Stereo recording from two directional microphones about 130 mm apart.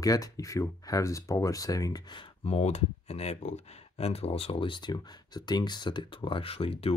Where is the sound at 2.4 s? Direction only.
55° left (ahead or behind).